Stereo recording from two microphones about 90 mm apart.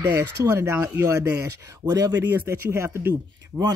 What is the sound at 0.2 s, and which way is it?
Speech, 25° right (ahead or behind).